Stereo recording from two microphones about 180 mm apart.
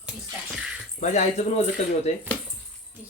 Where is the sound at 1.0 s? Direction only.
40° left (ahead or behind).